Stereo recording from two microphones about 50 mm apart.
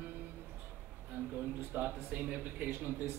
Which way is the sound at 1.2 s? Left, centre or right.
Right.